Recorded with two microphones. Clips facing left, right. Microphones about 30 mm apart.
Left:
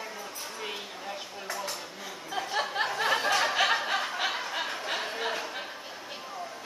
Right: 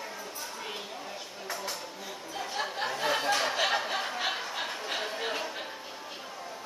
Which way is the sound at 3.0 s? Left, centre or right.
Centre.